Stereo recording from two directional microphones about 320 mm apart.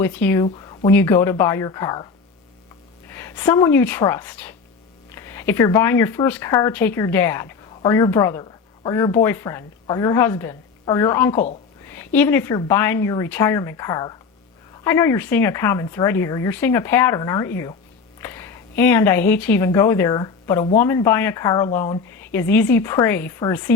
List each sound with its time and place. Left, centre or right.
0.0 s speech: centre
0.4 s a sound: centre
0.9 s speech: centre
3.1 s speech: centre